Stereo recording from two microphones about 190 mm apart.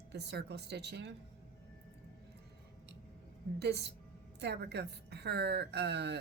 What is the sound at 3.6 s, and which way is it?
A woman's voice, 60° right (ahead or behind).